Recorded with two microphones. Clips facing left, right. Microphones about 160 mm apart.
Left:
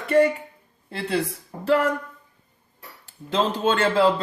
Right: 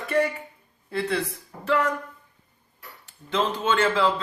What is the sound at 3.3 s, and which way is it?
Speech, 30° left (ahead or behind).